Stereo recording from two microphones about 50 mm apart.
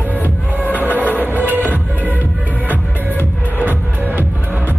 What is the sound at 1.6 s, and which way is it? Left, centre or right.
Music, left.